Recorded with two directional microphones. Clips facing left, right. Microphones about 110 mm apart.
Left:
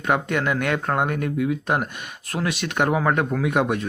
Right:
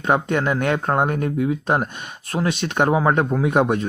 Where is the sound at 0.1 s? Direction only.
30° right (ahead or behind).